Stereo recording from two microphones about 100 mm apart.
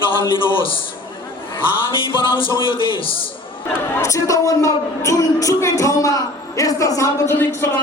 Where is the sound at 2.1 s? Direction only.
60° left (ahead or behind).